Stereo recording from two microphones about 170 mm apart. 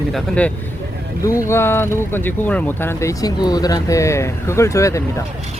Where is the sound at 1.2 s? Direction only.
15° left (ahead or behind).